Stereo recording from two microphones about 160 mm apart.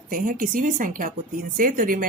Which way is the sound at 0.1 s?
55° right (ahead or behind).